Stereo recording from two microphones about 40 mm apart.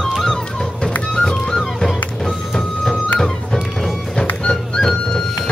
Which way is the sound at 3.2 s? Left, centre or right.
Centre.